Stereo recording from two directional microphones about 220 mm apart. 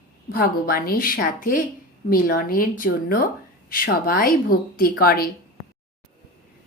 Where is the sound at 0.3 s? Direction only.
40° left (ahead or behind).